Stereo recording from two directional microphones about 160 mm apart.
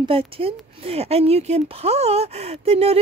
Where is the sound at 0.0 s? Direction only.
35° right (ahead or behind).